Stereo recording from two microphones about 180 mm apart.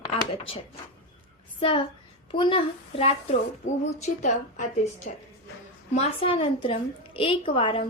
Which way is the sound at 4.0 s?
45° left (ahead or behind).